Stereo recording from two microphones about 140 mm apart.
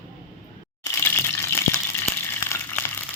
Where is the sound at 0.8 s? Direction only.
15° left (ahead or behind).